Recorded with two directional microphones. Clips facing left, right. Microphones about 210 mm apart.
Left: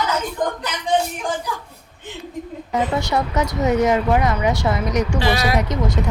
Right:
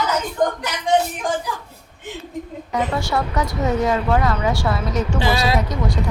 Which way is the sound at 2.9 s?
20° left (ahead or behind).